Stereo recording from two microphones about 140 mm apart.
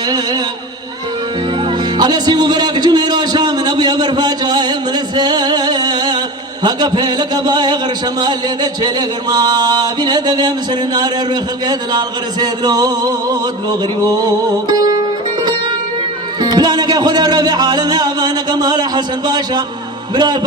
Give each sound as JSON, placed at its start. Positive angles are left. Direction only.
{"t": 0.1, "sound": "speech", "side_deg": -30}
{"t": 1.6, "sound": "a man's voice", "side_deg": -30}
{"t": 14.7, "sound": "music", "side_deg": -30}